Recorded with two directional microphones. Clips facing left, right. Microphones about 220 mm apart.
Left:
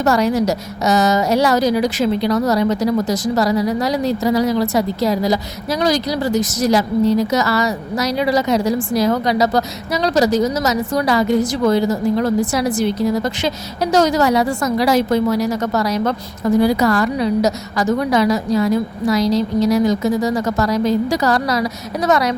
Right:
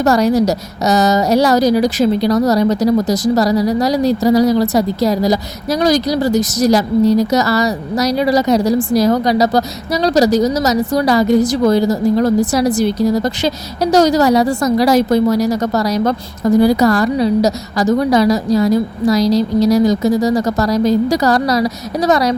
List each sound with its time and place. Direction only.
0.0 s a woman's voice: 40° right (ahead or behind)